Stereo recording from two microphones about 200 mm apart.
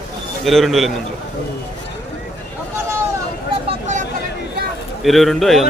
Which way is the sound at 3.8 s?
35° right (ahead or behind).